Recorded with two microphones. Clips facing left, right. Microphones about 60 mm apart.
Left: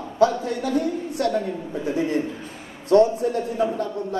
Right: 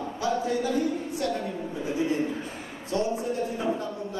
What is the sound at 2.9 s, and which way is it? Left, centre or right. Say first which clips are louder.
A man's voice: left 10 dB; left.